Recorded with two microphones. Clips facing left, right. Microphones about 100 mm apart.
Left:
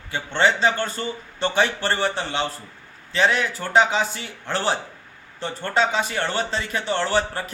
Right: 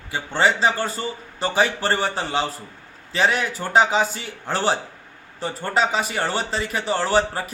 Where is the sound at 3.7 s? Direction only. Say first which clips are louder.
Right 1 dB; 15° right (ahead or behind).